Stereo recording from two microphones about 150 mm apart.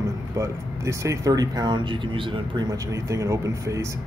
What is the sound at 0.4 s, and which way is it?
Speech, 20° right (ahead or behind).